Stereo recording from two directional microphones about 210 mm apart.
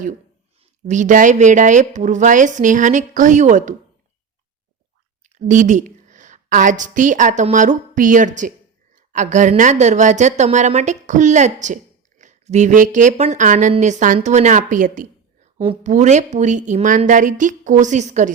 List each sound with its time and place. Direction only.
0.9 s a woman's voice: 35° right (ahead or behind)
5.2 s a woman's voice: 35° right (ahead or behind)